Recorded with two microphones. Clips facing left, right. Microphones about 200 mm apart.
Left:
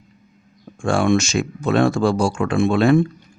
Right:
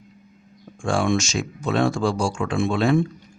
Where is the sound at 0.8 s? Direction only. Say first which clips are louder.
Left 4 dB; 60° left (ahead or behind).